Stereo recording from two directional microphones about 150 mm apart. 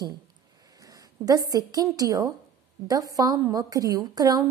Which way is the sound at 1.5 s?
25° right (ahead or behind).